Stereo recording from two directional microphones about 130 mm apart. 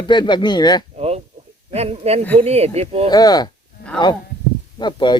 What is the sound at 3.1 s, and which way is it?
Speech, 30° left (ahead or behind).